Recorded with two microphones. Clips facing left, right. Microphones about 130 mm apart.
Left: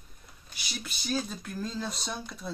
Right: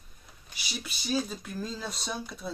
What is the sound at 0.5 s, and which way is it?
Speech, centre (ahead or behind).